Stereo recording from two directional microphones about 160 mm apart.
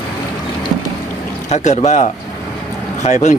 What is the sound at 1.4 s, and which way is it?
Speech, 45° left (ahead or behind).